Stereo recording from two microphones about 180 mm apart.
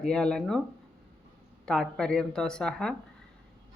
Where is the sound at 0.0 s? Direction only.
5° left (ahead or behind).